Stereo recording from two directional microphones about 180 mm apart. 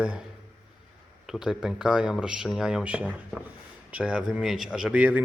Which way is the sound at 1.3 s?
5° right (ahead or behind).